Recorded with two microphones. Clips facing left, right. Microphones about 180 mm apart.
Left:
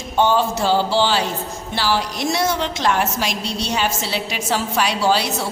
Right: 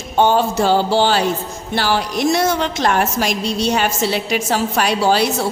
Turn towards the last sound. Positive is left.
turn(degrees=-50)  # may be behind; listen again after turning